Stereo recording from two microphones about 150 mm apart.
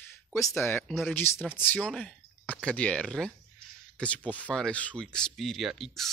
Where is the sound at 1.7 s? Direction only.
Centre (ahead or behind).